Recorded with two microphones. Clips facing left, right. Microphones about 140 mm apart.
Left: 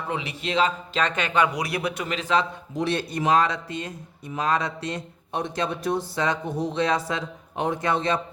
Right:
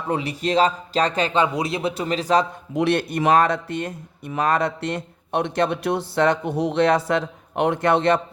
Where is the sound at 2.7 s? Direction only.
60° right (ahead or behind).